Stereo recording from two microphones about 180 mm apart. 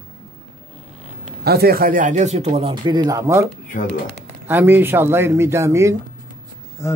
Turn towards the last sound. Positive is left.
turn(degrees=15)  # may be behind; listen again after turning